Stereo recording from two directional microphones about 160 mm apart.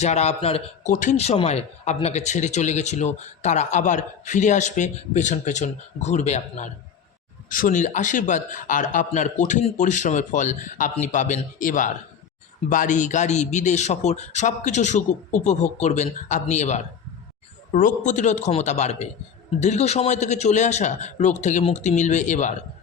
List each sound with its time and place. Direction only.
0.0 s a man's voice: 45° left (ahead or behind)